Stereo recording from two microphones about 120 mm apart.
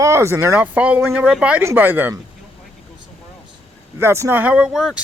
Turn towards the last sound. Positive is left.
turn(degrees=-5)  # may be behind; listen again after turning